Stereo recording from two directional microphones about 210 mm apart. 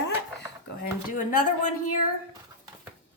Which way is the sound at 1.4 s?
90° left.